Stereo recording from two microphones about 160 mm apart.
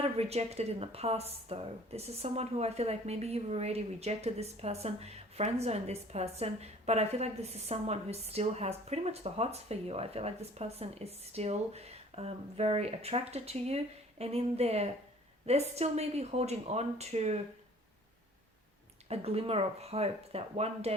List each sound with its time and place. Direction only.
0.0 s a woman's voice: 40° right (ahead or behind)
19.0 s a woman's voice: 40° right (ahead or behind)